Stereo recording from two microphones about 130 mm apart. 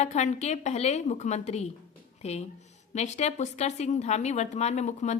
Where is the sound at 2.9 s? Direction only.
60° left (ahead or behind).